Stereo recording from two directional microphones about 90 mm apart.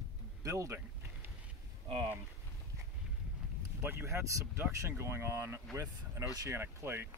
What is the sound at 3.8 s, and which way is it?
Speech, 25° right (ahead or behind).